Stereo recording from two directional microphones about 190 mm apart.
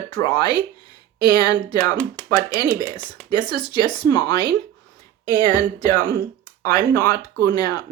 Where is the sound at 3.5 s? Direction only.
25° left (ahead or behind).